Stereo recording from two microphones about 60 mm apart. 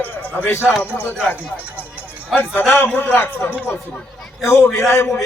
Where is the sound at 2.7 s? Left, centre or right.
Left.